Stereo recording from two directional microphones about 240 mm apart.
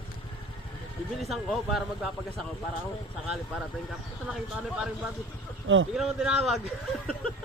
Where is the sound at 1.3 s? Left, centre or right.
Centre.